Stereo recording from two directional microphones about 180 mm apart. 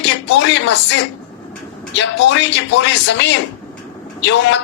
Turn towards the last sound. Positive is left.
turn(degrees=85)